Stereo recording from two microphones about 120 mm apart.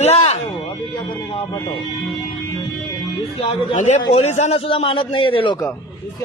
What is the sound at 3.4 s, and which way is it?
Speech, 50° left (ahead or behind).